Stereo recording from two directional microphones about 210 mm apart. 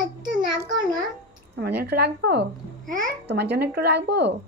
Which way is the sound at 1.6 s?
50° right (ahead or behind).